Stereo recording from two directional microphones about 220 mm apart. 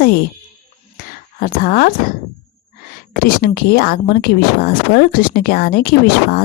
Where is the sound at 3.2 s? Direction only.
40° left (ahead or behind).